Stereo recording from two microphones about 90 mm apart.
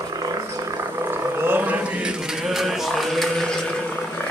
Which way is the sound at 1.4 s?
20° right (ahead or behind).